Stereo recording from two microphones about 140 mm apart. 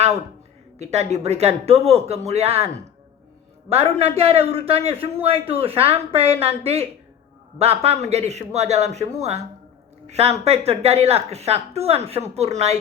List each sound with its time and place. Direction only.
0.8 s a woman's voice: 50° right (ahead or behind)
3.7 s a woman's voice: 45° right (ahead or behind)